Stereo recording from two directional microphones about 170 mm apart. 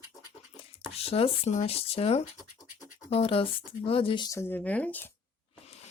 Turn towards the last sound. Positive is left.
turn(degrees=10)  # may be behind; listen again after turning